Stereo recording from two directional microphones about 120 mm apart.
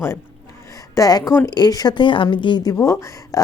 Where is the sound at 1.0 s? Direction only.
35° left (ahead or behind).